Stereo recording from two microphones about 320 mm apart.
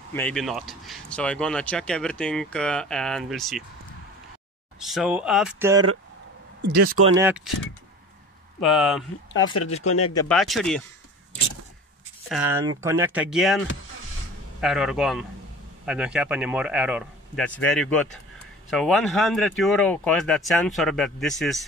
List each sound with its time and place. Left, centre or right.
0.1 s speech: centre
4.8 s speech: centre
6.6 s speech: right
7.2 s speech: centre
8.5 s speech: centre
9.7 s speech: centre
10.1 s speech: centre
12.3 s speech: centre
14.6 s speech: centre